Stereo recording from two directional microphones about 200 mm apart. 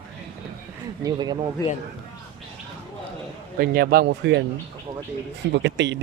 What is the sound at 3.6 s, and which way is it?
Speech, 50° right (ahead or behind).